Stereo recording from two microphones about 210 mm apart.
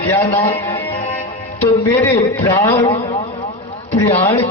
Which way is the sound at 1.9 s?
10° left (ahead or behind).